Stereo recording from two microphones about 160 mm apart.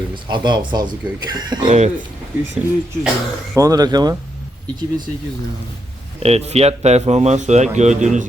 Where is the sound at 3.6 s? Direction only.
20° right (ahead or behind).